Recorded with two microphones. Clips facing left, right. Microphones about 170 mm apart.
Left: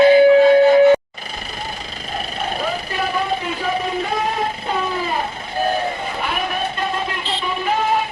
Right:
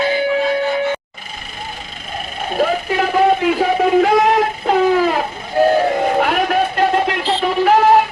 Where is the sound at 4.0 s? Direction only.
85° right.